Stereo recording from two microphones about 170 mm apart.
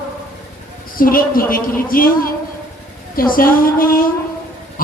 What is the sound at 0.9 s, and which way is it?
A woman's voice, 55° left (ahead or behind).